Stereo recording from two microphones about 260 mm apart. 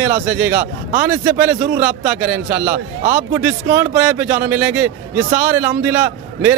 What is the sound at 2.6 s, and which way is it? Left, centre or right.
Speech, right.